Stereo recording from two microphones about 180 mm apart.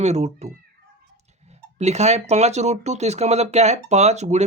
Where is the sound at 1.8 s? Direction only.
40° right (ahead or behind).